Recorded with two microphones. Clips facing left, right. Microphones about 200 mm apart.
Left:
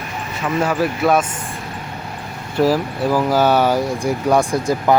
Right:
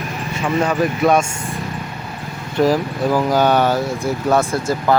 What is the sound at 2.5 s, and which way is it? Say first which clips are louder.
Speech: even; 5° left (ahead or behind).